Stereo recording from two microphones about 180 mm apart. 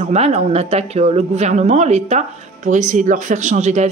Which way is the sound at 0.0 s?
40° right (ahead or behind).